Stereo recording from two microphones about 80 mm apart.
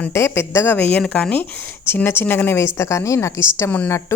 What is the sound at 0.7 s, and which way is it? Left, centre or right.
Speech, centre.